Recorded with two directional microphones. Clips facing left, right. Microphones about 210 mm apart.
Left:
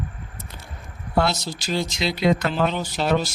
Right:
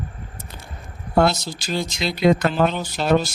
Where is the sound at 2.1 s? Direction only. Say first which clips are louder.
Right 4 dB; 50° right (ahead or behind).